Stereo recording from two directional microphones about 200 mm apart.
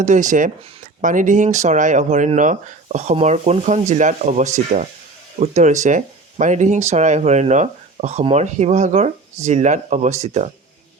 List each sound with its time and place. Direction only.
0.0 s speech: 40° right (ahead or behind)